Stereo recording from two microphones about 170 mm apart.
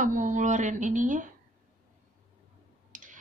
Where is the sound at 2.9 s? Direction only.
50° right (ahead or behind).